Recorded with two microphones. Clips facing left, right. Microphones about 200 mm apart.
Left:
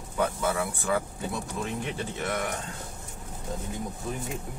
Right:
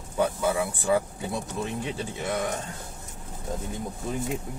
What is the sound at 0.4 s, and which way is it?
Speech, 15° right (ahead or behind).